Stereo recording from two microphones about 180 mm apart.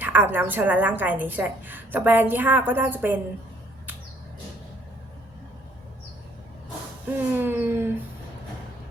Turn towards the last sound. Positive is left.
turn(degrees=-10)  # may be behind; listen again after turning